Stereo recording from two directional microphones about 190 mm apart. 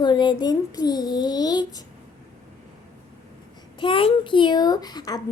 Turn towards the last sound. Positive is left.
turn(degrees=20)  # may be behind; listen again after turning